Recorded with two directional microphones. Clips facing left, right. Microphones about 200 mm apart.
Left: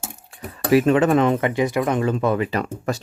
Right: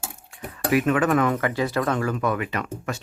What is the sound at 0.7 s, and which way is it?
Speech, 30° left (ahead or behind).